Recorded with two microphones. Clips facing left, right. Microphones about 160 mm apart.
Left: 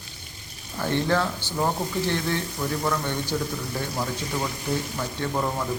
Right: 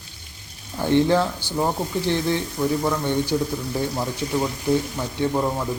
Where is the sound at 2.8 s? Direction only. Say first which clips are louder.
Right 4 dB; 15° right (ahead or behind).